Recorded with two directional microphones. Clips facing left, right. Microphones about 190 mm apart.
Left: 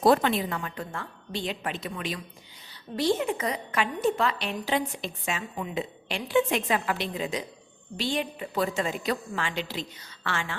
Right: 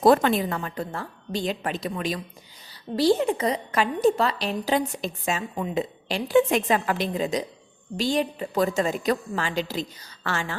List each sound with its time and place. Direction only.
0.0 s a woman's voice: 50° right (ahead or behind)